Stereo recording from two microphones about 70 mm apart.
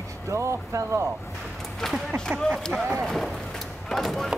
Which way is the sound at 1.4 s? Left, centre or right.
Centre.